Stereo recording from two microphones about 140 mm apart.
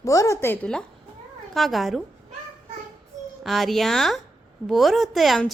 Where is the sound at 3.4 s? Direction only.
Centre (ahead or behind).